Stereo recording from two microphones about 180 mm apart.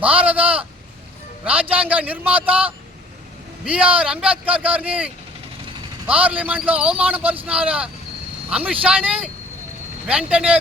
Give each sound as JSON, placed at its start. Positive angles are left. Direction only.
{"t": 0.0, "sound": "speech", "side_deg": -10}
{"t": 1.7, "sound": "speech", "side_deg": -10}